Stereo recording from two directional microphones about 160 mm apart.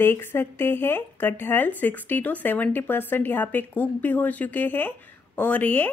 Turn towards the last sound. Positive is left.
turn(degrees=10)  # may be behind; listen again after turning